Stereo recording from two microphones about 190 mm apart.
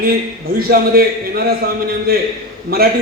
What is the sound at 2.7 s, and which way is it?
Speech, 55° right (ahead or behind).